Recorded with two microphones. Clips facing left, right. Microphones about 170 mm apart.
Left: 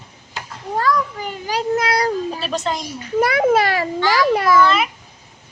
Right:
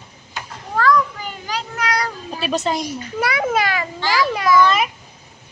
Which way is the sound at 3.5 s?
30° left (ahead or behind).